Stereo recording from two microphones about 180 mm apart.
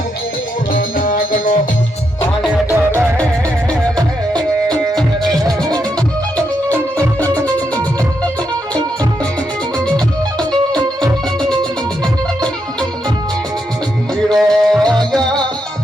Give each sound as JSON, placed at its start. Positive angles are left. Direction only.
{"t": 0.7, "sound": "music", "side_deg": 50}
{"t": 2.4, "sound": "music", "side_deg": 15}
{"t": 6.7, "sound": "music", "side_deg": 10}
{"t": 14.3, "sound": "music", "side_deg": 0}
{"t": 15.1, "sound": "salsa music", "side_deg": 5}